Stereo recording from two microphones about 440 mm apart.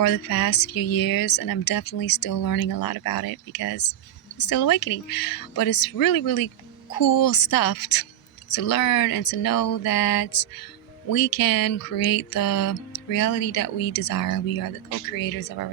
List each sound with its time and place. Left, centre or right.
0.0 s speech: left